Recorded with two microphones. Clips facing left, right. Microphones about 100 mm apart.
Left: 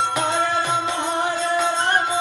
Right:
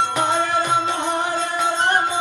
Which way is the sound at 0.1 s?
20° right (ahead or behind).